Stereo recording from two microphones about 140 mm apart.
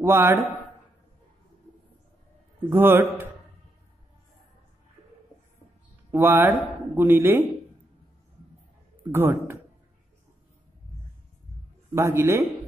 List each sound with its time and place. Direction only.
0.0 s speech: 15° right (ahead or behind)
2.7 s speech: 15° right (ahead or behind)
6.1 s speech: 15° right (ahead or behind)
9.1 s speech: 15° right (ahead or behind)
11.9 s speech: 15° right (ahead or behind)